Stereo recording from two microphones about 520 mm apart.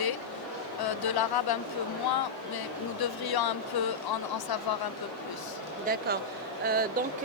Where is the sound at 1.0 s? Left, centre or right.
Left.